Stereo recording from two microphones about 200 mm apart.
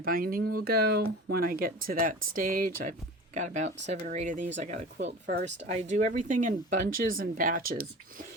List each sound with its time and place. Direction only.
0.0 s speech: 45° right (ahead or behind)
5.2 s speech: 60° right (ahead or behind)
5.5 s speech: 35° right (ahead or behind)